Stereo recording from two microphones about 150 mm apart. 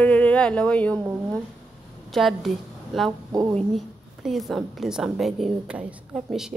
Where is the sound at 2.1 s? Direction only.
Centre (ahead or behind).